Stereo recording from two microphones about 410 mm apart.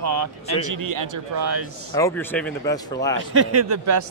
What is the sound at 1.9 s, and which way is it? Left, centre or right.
Speech, centre.